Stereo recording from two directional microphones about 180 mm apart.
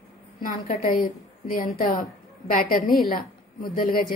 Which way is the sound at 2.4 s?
50° left (ahead or behind).